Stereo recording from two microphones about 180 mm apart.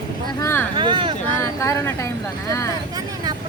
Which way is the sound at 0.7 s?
25° right (ahead or behind).